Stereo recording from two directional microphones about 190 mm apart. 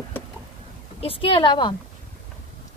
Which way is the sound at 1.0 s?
30° left (ahead or behind).